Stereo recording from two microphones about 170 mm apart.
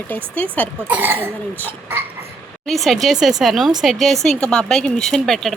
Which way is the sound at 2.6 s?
Centre (ahead or behind).